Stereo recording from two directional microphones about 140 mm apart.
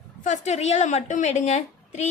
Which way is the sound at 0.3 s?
55° left (ahead or behind).